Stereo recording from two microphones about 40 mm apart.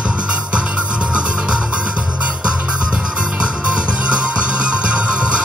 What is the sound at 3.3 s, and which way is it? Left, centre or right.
Music, right.